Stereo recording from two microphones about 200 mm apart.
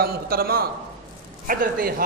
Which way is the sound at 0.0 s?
50° right (ahead or behind).